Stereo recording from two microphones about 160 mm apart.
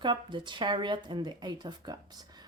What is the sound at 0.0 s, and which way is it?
A woman's voice, 30° right (ahead or behind).